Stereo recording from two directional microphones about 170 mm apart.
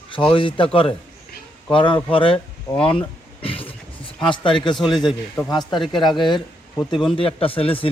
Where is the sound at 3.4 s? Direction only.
35° left (ahead or behind).